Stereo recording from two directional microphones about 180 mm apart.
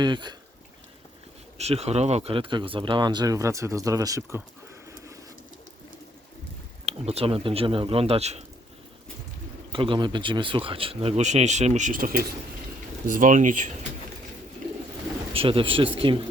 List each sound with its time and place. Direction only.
0.0 s speech: 25° right (ahead or behind)
1.5 s speech: 35° right (ahead or behind); by 4.4 s 15° right (ahead or behind)
6.8 s speech: 35° right (ahead or behind)
9.7 s speech: 30° right (ahead or behind); by 13.7 s 45° right (ahead or behind)
15.3 s speech: 30° right (ahead or behind)